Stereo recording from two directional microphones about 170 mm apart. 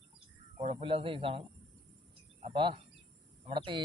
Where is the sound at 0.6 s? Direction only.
35° right (ahead or behind).